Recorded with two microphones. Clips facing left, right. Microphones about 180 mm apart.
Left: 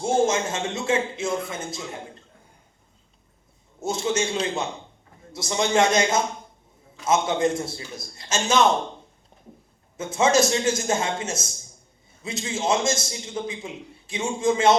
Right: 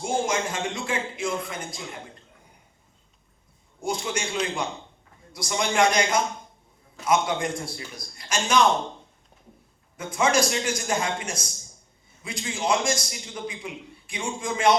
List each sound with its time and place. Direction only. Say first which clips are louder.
0.0 s speech: left 4 dB; 25° left (ahead or behind)
3.8 s speech: left 4 dB; 25° left (ahead or behind)
10.0 s speech: left 3 dB; 25° left (ahead or behind)